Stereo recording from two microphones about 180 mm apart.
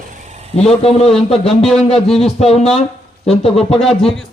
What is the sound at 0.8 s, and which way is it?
Speech, 35° left (ahead or behind).